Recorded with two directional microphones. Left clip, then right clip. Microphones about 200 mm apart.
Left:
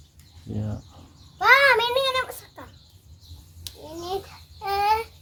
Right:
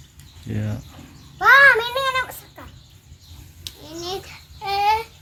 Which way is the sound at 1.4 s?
35° left (ahead or behind).